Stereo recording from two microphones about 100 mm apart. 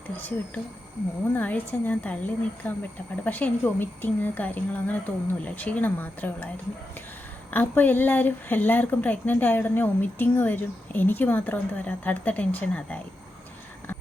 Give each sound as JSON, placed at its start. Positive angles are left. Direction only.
{"t": 0.2, "sound": "speech", "side_deg": 15}
{"t": 7.5, "sound": "speech", "side_deg": 20}